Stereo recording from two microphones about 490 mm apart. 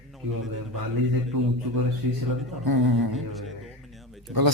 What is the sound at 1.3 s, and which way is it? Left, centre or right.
Speech, right.